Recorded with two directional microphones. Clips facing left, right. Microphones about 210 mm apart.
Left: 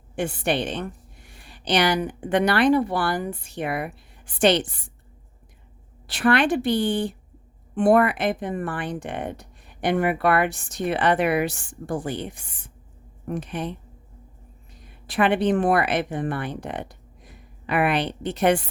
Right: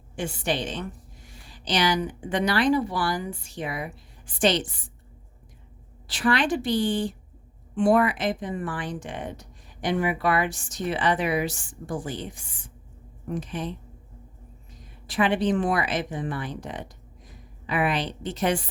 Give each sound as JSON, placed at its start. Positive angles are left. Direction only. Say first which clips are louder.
{"t": 0.2, "sound": "speech", "louder": "left 4 dB", "side_deg": 60}
{"t": 6.1, "sound": "a woman's voice", "louder": "left 4 dB", "side_deg": 60}